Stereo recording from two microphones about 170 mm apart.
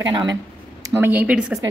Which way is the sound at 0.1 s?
30° right (ahead or behind).